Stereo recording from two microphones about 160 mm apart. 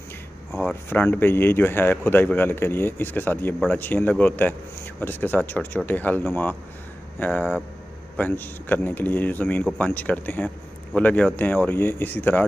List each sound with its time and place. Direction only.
0.5 s speech: 5° left (ahead or behind)